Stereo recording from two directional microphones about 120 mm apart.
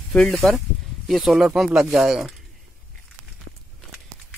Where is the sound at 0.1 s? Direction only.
15° left (ahead or behind).